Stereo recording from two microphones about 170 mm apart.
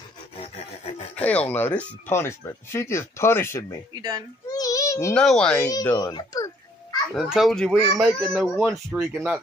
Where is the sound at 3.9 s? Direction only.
25° right (ahead or behind).